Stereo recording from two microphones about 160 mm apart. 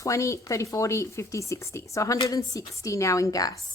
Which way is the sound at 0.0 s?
20° left (ahead or behind).